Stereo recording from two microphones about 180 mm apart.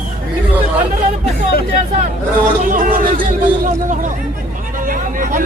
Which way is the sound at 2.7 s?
45° right (ahead or behind).